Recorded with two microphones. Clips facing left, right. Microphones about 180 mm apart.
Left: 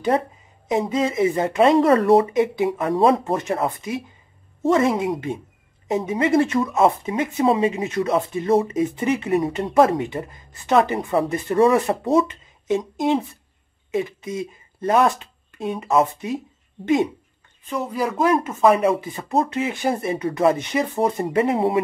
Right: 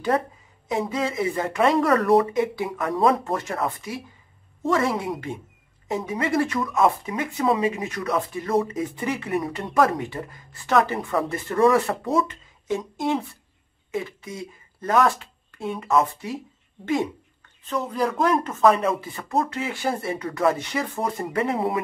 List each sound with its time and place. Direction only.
0.1 s speech: 25° left (ahead or behind)
17.6 s speech: 10° left (ahead or behind)
18.8 s speech: 20° left (ahead or behind)